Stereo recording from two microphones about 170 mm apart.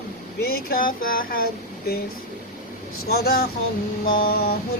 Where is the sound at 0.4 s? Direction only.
60° left (ahead or behind).